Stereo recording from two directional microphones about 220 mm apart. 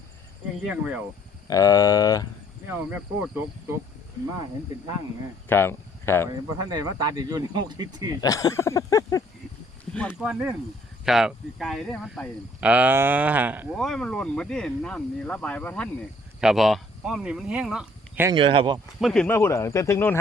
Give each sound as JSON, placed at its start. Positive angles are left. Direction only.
{"t": 0.7, "sound": "speech", "side_deg": -5}
{"t": 1.5, "sound": "speech", "side_deg": 15}
{"t": 2.6, "sound": "speech", "side_deg": -10}
{"t": 5.5, "sound": "speech", "side_deg": 10}
{"t": 6.5, "sound": "speech", "side_deg": -20}
{"t": 8.2, "sound": "speech", "side_deg": 15}
{"t": 9.9, "sound": "speech", "side_deg": 0}
{"t": 18.3, "sound": "speech", "side_deg": -25}
{"t": 18.9, "sound": "speech", "side_deg": 0}